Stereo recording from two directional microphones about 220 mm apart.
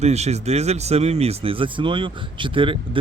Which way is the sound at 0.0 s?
30° right (ahead or behind).